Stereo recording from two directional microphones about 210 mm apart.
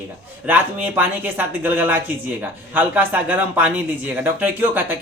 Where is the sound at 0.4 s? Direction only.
10° right (ahead or behind).